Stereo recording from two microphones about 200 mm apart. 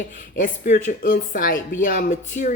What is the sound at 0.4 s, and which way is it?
A woman's voice, 40° left (ahead or behind).